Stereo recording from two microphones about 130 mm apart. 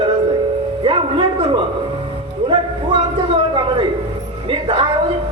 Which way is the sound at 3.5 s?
40° right (ahead or behind).